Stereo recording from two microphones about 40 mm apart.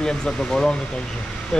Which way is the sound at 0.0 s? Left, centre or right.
Centre.